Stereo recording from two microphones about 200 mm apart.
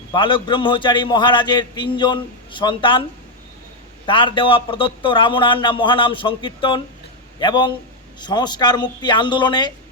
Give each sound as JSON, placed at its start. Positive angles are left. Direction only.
{"t": 0.1, "sound": "a man's voice", "side_deg": 25}
{"t": 4.0, "sound": "a man's voice", "side_deg": 25}